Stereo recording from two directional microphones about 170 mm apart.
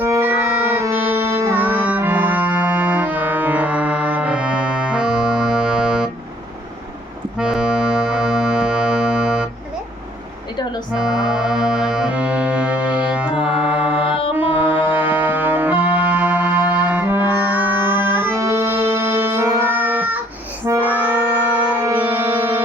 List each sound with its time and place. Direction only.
0.0 s music: 10° right (ahead or behind)
7.3 s music: 5° right (ahead or behind)
10.9 s accordion: 5° right (ahead or behind)
14.3 s music: 10° right (ahead or behind)
22.3 s music: 30° right (ahead or behind)